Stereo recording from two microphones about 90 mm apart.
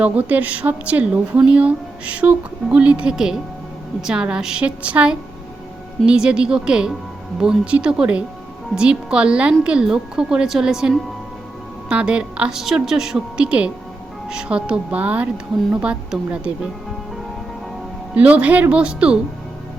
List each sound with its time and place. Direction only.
0.0 s speech: 15° right (ahead or behind)
18.1 s speech: 15° right (ahead or behind)